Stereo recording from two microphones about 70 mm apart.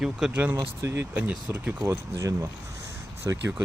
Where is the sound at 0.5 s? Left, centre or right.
Right.